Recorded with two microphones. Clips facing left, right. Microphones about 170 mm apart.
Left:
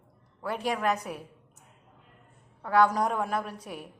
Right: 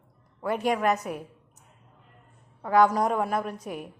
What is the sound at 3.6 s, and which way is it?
Speech, 45° right (ahead or behind).